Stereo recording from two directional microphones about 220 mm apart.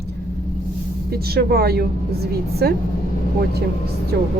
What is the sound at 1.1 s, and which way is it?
Speech, 45° right (ahead or behind).